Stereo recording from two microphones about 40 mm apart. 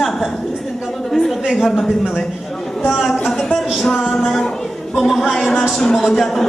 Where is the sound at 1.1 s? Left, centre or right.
Centre.